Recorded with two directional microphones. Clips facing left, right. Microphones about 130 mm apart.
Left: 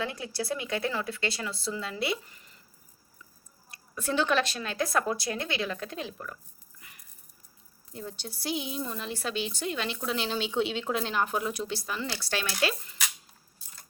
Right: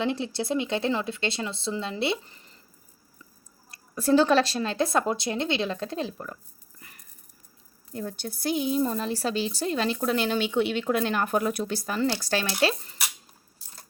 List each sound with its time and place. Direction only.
0.0 s speech: 25° right (ahead or behind)
3.7 s speech: 35° right (ahead or behind)
6.7 s a sound: 45° right (ahead or behind)
7.9 s a woman's voice: 55° right (ahead or behind)